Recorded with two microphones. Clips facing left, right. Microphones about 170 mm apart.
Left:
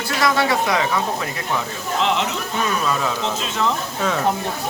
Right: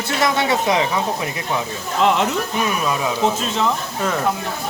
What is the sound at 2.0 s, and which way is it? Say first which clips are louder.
Speech: right 4 dB; 50° right (ahead or behind).